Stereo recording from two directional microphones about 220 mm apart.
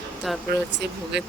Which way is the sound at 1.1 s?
50° right (ahead or behind).